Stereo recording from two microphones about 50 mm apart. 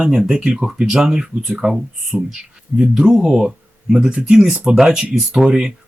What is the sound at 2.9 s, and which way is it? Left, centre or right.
Speech, right.